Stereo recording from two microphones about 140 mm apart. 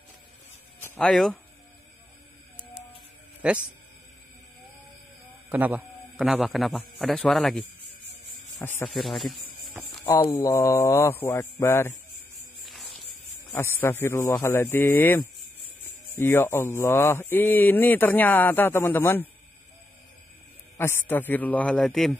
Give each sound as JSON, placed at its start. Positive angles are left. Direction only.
{"t": 0.9, "sound": "speech", "side_deg": 5}
{"t": 3.4, "sound": "speech", "side_deg": -10}
{"t": 5.5, "sound": "a man's voice", "side_deg": -15}
{"t": 8.5, "sound": "speech", "side_deg": 20}
{"t": 8.9, "sound": "speech", "side_deg": 0}
{"t": 10.0, "sound": "speech", "side_deg": 35}
{"t": 10.3, "sound": "speech", "side_deg": 25}
{"t": 12.6, "sound": "music", "side_deg": 0}
{"t": 13.5, "sound": "speech", "side_deg": 15}
{"t": 20.7, "sound": "speech", "side_deg": 15}